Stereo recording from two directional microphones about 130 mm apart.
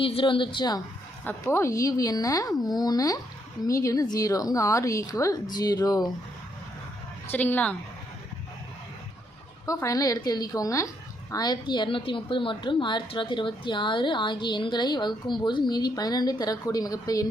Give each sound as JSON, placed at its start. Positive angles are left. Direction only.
{"t": 0.0, "sound": "a woman's voice", "side_deg": 45}
{"t": 1.2, "sound": "a woman's voice", "side_deg": 15}
{"t": 7.3, "sound": "speech", "side_deg": 15}
{"t": 9.6, "sound": "a woman's voice", "side_deg": 25}